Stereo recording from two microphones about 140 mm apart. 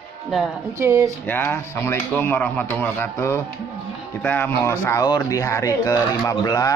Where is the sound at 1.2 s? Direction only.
15° left (ahead or behind).